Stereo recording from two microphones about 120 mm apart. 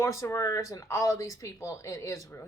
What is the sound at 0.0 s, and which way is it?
A woman's voice, 25° left (ahead or behind).